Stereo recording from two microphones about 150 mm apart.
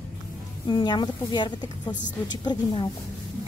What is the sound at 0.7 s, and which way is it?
A woman's voice, 30° left (ahead or behind).